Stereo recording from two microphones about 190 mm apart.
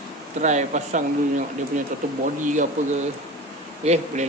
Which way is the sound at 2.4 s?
40° right (ahead or behind).